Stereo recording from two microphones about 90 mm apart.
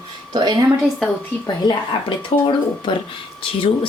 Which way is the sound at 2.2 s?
65° left (ahead or behind).